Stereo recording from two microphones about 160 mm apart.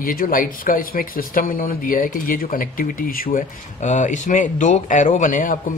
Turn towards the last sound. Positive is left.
turn(degrees=55)  # may be behind; listen again after turning